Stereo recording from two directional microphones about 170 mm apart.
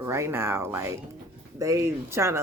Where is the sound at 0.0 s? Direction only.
15° right (ahead or behind).